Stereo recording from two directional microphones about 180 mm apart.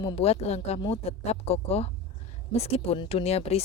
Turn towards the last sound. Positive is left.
turn(degrees=35)  # may be behind; listen again after turning